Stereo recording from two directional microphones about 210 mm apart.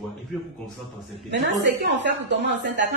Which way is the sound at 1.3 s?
55° right (ahead or behind).